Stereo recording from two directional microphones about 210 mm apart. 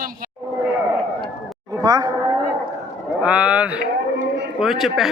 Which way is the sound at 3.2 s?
5° right (ahead or behind).